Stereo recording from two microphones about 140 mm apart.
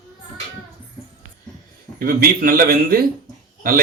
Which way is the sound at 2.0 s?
90° right.